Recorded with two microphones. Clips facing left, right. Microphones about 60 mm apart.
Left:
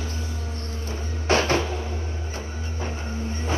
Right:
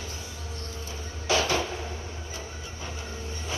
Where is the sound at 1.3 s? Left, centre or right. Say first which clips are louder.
Left 4 dB; left.